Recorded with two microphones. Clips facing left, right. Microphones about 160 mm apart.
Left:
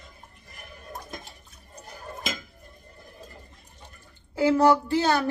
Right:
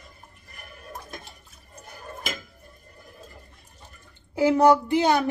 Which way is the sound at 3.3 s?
5° right (ahead or behind).